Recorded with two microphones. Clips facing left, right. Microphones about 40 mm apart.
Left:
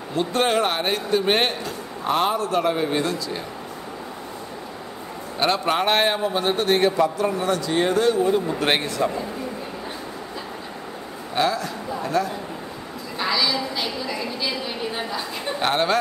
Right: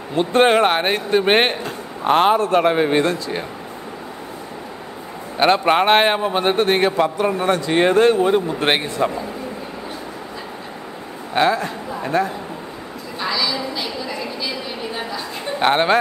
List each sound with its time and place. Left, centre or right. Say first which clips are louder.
0.1 s a man's voice: right 6 dB; right
5.4 s a man's voice: right 6 dB; right
8.7 s a man's voice: right 2 dB; right
11.3 s a man's voice: right 5 dB; right
13.2 s a sound: even; centre
15.0 s a sound: right 1 dB; centre
15.6 s a man's voice: right 5 dB; right